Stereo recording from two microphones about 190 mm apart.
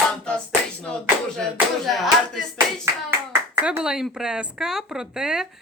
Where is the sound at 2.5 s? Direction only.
15° right (ahead or behind).